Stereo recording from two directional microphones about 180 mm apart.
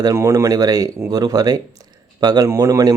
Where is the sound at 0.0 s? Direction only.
15° right (ahead or behind).